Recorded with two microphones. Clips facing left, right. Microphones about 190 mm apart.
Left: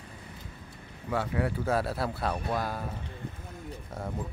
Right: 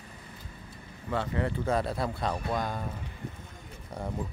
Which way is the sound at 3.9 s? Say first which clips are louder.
Right 2 dB; centre (ahead or behind).